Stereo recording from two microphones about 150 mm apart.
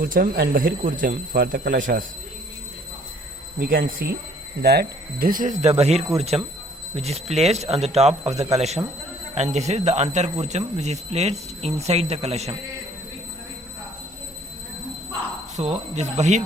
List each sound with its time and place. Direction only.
0.0 s speech: 75° right (ahead or behind)
3.6 s speech: 70° right (ahead or behind)
4.6 s speech: 90° right; by 12.5 s 45° right (ahead or behind)
15.5 s speech: 50° right (ahead or behind)